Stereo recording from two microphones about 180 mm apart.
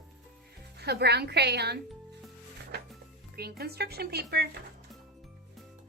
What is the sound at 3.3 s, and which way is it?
Speech, 60° right (ahead or behind).